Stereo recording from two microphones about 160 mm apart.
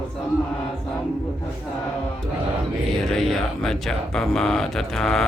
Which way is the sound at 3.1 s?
Centre (ahead or behind).